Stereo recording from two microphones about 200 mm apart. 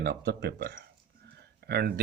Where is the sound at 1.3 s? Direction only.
55° right (ahead or behind).